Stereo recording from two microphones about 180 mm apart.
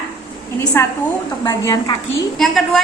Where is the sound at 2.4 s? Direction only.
Centre (ahead or behind).